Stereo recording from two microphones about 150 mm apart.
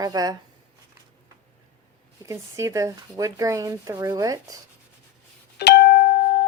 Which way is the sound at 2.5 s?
20° right (ahead or behind).